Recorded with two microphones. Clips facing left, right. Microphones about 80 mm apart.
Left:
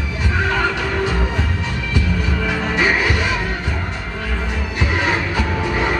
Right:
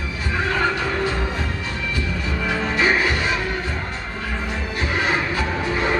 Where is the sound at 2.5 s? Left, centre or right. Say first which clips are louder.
Left 1 dB; centre.